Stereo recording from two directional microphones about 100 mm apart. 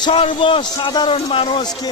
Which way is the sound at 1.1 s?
70° left (ahead or behind).